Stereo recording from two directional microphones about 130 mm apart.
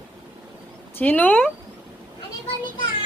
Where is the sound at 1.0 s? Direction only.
10° left (ahead or behind).